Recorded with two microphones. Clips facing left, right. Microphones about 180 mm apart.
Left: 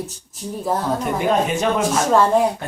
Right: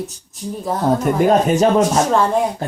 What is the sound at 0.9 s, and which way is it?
Speech, 40° right (ahead or behind).